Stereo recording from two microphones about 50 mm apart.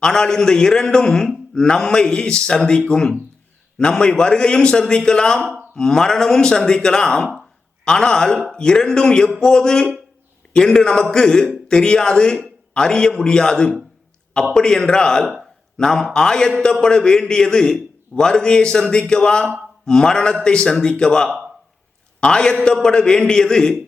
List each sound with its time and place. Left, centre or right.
0.0 s a man's voice: centre